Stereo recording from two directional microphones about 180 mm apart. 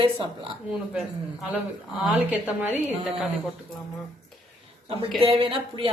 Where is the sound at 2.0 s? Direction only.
5° right (ahead or behind).